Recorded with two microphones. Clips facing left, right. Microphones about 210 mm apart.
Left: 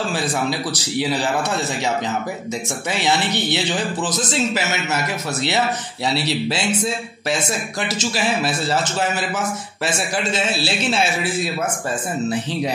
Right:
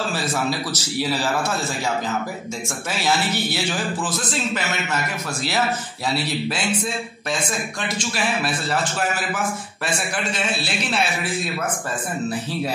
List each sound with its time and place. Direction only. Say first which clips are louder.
0.1 s a man's voice: left 2 dB; 15° left (ahead or behind)
3.5 s speech: left 3 dB; 20° left (ahead or behind)
8.1 s speech: left 2 dB; 30° left (ahead or behind)